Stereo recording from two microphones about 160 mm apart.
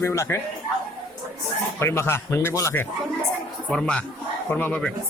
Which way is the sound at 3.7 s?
5° left (ahead or behind).